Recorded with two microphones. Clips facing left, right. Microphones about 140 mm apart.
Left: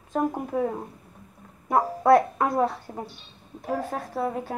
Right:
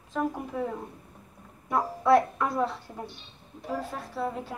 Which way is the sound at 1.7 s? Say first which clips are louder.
Left 3 dB; 50° left (ahead or behind).